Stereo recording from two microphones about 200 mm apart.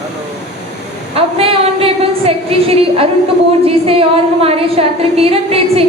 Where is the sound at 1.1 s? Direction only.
30° right (ahead or behind).